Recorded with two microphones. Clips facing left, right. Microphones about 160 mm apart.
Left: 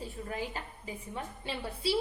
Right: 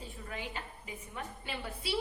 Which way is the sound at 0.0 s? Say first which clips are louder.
Left 5 dB; 40° left (ahead or behind).